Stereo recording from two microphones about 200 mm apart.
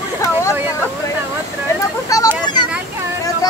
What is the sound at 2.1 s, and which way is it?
Speech, 15° left (ahead or behind).